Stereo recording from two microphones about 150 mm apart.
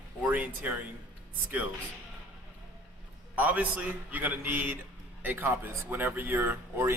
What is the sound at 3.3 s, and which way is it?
Speech, 10° right (ahead or behind).